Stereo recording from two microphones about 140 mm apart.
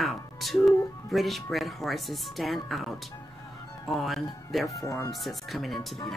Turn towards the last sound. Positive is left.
turn(degrees=0)  # may be behind; listen again after turning